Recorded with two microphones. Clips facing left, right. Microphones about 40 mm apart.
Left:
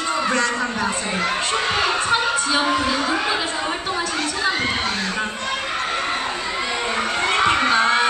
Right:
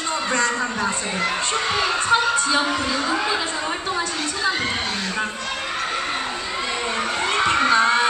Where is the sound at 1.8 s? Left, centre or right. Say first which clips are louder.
Right 3 dB; centre.